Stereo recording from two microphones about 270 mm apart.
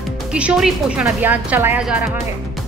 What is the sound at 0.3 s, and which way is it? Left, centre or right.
Speech, centre.